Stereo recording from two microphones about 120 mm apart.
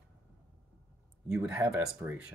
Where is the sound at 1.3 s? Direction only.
10° right (ahead or behind).